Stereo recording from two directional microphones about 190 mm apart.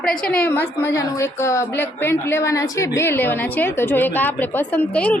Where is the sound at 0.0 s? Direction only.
5° left (ahead or behind).